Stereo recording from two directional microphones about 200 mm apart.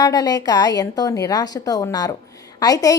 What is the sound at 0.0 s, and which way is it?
A woman's voice, 20° left (ahead or behind).